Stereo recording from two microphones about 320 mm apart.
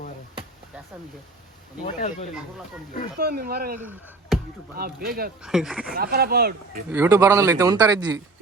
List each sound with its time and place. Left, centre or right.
2.0 s speech: left
3.2 s speech: right
3.8 s speech: centre
4.8 s speech: right
5.4 s speech: centre
5.8 s speech: right
6.9 s speech: centre